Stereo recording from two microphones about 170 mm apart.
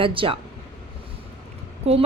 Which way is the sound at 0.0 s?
30° right (ahead or behind).